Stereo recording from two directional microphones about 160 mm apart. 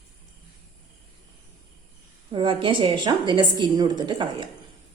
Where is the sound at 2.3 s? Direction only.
30° right (ahead or behind).